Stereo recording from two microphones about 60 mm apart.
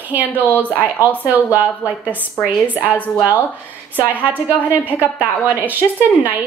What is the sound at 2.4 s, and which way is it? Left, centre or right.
Speech, left.